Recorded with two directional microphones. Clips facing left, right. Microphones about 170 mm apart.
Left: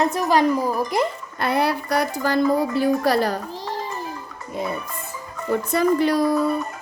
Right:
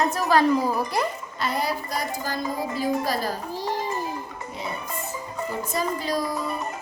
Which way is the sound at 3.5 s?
10° right (ahead or behind).